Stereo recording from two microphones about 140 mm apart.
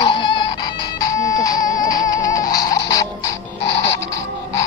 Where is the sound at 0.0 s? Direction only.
35° left (ahead or behind).